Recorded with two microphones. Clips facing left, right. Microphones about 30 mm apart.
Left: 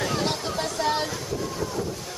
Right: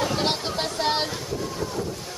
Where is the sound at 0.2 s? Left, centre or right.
Right.